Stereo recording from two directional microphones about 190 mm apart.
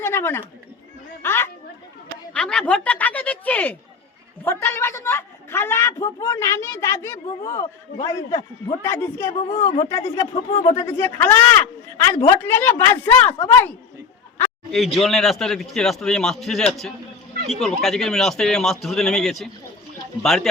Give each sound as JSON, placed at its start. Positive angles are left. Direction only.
{"t": 0.0, "sound": "a woman's voice", "side_deg": 15}
{"t": 9.6, "sound": "speech", "side_deg": 35}
{"t": 9.9, "sound": "a man's voice", "side_deg": 15}
{"t": 14.3, "sound": "a sound", "side_deg": 5}
{"t": 14.9, "sound": "a man's voice", "side_deg": 0}